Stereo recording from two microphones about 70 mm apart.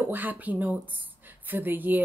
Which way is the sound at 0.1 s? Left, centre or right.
Right.